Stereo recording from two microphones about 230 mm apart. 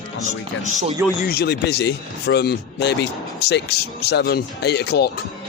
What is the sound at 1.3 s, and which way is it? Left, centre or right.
Speech, left.